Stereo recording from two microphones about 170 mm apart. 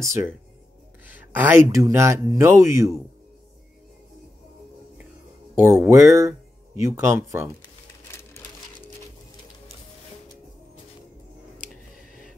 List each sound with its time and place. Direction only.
0.0 s speech: 15° right (ahead or behind)
5.6 s speech: 15° right (ahead or behind)
11.7 s a sound: centre (ahead or behind)